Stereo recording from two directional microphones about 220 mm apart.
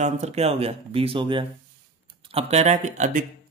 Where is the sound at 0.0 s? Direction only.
30° right (ahead or behind).